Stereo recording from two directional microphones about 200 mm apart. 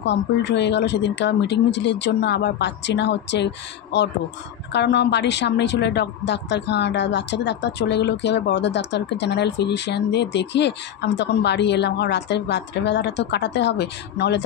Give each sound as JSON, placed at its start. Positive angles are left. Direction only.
{"t": 0.0, "sound": "speech", "side_deg": 60}